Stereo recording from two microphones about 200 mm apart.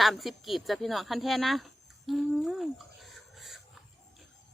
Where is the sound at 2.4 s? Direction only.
Centre (ahead or behind).